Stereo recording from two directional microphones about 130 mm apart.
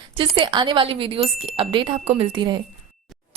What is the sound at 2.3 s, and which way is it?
Speech, 35° right (ahead or behind).